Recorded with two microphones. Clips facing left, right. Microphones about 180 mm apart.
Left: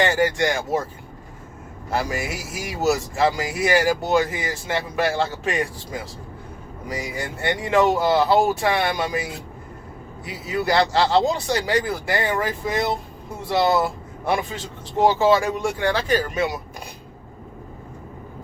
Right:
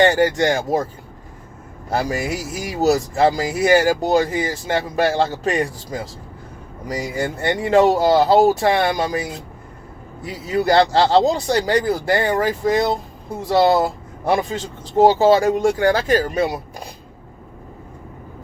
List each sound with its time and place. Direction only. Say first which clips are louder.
0.0 s speech: right 4 dB; 35° right (ahead or behind)
1.9 s speech: right 4 dB; 35° right (ahead or behind)
10.5 s speech: right 5 dB; 35° right (ahead or behind)